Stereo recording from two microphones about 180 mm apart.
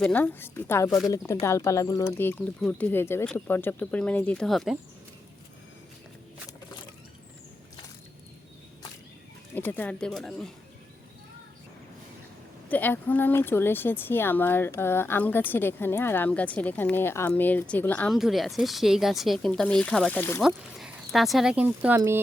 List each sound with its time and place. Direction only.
0.0 s speech: 10° left (ahead or behind)
9.6 s speech: 10° left (ahead or behind)
12.6 s speech: 10° left (ahead or behind)
20.7 s speech: centre (ahead or behind)